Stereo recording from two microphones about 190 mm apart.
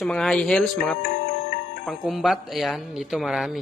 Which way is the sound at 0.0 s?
5° left (ahead or behind).